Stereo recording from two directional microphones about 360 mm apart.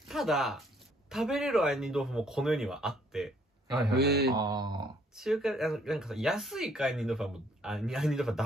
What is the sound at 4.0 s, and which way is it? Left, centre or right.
Mantra, right.